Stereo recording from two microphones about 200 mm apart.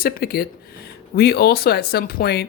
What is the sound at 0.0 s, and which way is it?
Speech, 50° left (ahead or behind).